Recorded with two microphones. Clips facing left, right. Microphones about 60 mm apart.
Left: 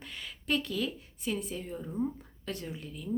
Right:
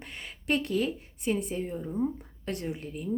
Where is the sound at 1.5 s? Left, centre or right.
Right.